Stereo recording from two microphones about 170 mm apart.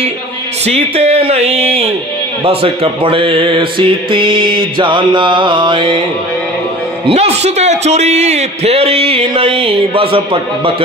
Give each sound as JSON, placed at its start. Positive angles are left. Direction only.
{"t": 0.7, "sound": "a man's voice", "side_deg": -40}
{"t": 2.4, "sound": "music", "side_deg": -35}
{"t": 7.1, "sound": "a man's voice", "side_deg": -40}